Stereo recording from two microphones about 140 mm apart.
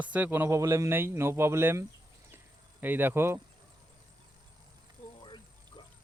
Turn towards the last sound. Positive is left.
turn(degrees=35)  # may be behind; listen again after turning